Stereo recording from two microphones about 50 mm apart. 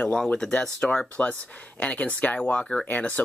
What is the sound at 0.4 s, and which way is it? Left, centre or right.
Speech, centre.